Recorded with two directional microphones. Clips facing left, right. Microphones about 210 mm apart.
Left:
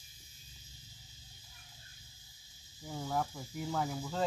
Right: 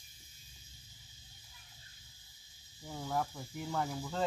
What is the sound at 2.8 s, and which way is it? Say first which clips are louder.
Speech: left 1 dB; centre (ahead or behind).